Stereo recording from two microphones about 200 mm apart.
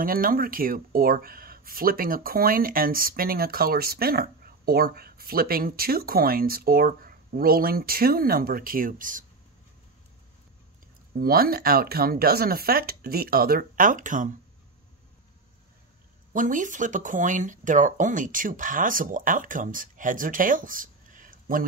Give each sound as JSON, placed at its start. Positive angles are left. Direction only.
{"t": 0.0, "sound": "speech", "side_deg": -45}
{"t": 11.1, "sound": "speech", "side_deg": -50}
{"t": 16.3, "sound": "speech", "side_deg": -40}